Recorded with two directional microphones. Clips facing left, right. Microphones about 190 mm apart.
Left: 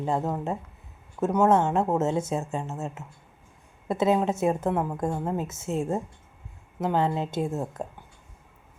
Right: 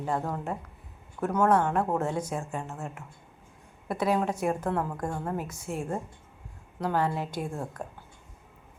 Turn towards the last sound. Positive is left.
turn(degrees=25)  # may be behind; listen again after turning